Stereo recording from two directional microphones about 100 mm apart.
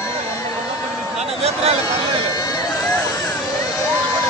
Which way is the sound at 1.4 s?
90° right.